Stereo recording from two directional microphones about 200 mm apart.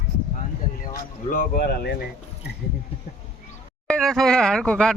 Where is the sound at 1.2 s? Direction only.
45° left (ahead or behind).